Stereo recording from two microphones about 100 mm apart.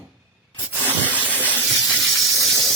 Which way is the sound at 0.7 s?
20° right (ahead or behind).